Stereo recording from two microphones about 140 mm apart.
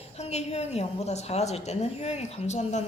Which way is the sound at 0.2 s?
50° left (ahead or behind).